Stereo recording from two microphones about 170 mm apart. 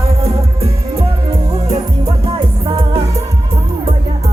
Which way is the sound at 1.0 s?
20° right (ahead or behind).